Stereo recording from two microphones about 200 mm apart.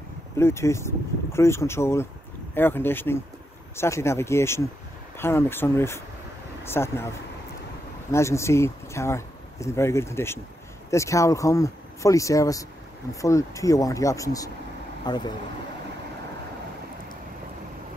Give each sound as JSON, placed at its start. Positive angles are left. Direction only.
{"t": 0.4, "sound": "speech", "side_deg": 15}
{"t": 8.1, "sound": "speech", "side_deg": 15}